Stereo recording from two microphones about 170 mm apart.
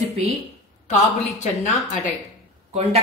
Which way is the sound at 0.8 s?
45° left (ahead or behind).